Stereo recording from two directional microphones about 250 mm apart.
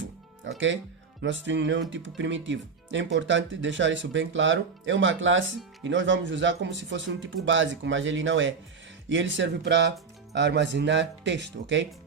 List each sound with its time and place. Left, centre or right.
0.0 s music: right
1.2 s speech: right